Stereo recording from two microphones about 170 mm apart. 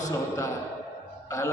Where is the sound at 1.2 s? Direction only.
20° left (ahead or behind).